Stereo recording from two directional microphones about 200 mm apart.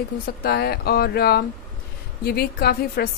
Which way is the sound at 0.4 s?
50° left (ahead or behind).